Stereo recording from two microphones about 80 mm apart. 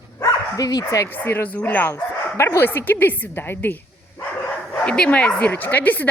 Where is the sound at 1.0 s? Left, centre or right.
Left.